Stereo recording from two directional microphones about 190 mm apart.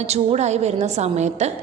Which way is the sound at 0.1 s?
35° right (ahead or behind).